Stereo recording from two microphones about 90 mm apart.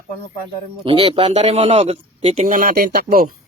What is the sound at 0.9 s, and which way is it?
A man's voice, 85° right.